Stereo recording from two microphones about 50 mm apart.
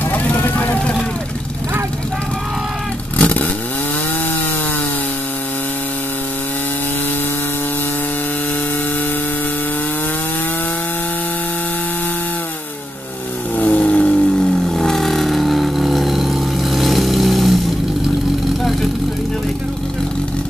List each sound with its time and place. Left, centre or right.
0.1 s vehicle: left
3.2 s vehicle: left
13.6 s vehicle: left; by 17.6 s centre
18.6 s vehicle: centre